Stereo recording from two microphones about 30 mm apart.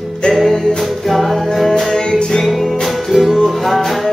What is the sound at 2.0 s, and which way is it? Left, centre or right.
Music, left.